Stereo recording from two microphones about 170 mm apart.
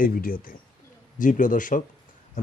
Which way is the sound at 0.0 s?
55° left (ahead or behind).